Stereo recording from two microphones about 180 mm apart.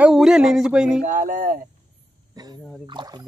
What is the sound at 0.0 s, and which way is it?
Speech, centre (ahead or behind).